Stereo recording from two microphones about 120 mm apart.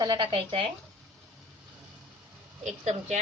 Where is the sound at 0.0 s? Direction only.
35° right (ahead or behind).